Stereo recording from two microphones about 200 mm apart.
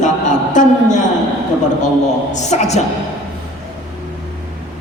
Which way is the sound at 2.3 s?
35° left (ahead or behind).